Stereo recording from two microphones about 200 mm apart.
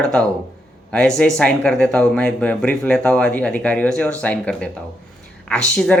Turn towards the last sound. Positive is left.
turn(degrees=5)  # may be behind; listen again after turning